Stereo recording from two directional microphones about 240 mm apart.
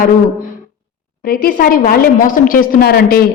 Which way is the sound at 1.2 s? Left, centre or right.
Left.